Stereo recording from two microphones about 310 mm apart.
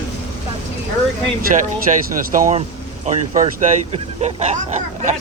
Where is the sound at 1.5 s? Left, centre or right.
Right.